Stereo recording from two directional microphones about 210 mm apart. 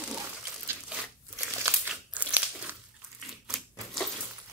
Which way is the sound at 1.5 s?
10° right (ahead or behind).